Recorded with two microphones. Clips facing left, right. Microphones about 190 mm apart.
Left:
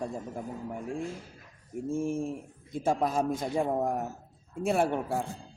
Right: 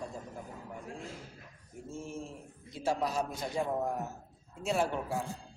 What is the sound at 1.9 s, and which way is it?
A man's voice, 55° left (ahead or behind).